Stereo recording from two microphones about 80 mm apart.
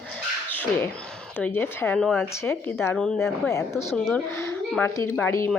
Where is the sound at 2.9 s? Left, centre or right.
Centre.